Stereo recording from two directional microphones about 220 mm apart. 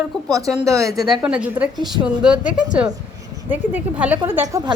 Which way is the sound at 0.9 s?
Centre (ahead or behind).